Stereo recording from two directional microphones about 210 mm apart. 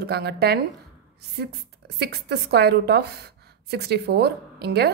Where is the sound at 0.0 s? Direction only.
50° right (ahead or behind).